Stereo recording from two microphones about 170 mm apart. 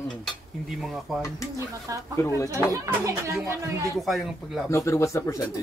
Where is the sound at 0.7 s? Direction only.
Centre (ahead or behind).